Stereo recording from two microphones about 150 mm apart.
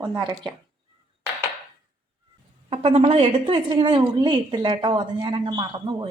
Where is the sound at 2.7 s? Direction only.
45° right (ahead or behind).